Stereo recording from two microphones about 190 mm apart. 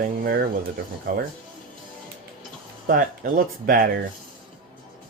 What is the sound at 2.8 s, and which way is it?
Speech, 50° right (ahead or behind).